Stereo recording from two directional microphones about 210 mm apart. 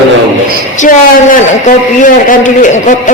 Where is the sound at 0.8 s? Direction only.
40° left (ahead or behind).